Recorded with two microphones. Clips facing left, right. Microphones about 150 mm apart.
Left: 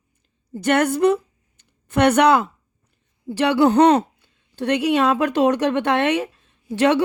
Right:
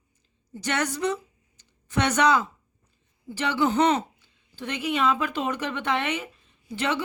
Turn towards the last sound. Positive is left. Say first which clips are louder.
# left 11 dB
turn(degrees=75)  # may be behind; listen again after turning